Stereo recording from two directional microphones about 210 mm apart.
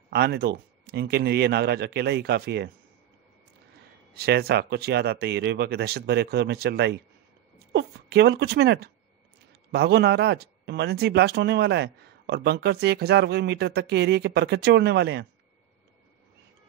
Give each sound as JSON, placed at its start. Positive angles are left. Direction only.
{"t": 0.1, "sound": "speech", "side_deg": -50}
{"t": 4.1, "sound": "speech", "side_deg": -50}